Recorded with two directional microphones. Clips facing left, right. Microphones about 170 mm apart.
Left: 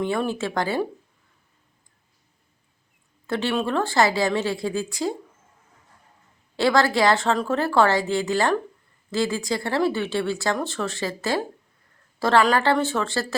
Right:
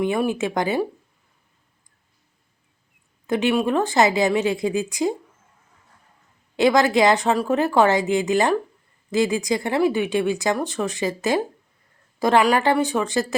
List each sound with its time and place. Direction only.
0.0 s speech: 15° right (ahead or behind)
3.2 s speech: 15° right (ahead or behind)
6.6 s speech: 20° right (ahead or behind)